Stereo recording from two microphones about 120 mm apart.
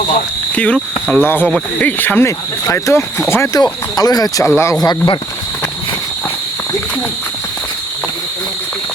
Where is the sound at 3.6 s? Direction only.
30° left (ahead or behind).